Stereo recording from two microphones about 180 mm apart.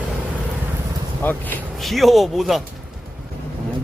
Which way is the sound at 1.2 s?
10° left (ahead or behind).